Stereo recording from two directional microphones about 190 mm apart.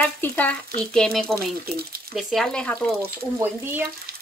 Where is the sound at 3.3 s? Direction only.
10° right (ahead or behind).